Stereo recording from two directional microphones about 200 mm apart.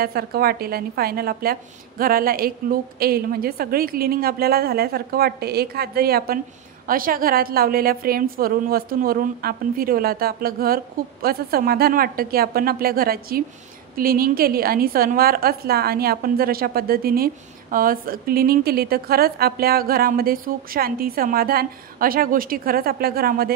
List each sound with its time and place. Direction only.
0.0 s a woman's voice: 50° right (ahead or behind)